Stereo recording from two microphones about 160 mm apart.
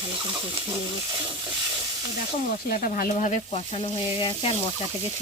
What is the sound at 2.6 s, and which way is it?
Speech, 60° left (ahead or behind).